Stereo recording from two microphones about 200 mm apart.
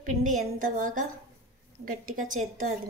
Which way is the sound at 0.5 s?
40° right (ahead or behind).